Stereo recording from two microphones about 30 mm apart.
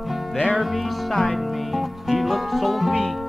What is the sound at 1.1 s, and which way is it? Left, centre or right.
Music, centre.